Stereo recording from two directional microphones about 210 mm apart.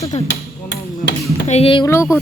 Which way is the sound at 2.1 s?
15° left (ahead or behind).